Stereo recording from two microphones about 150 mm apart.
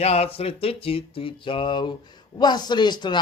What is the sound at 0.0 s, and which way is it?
Speech, 45° left (ahead or behind).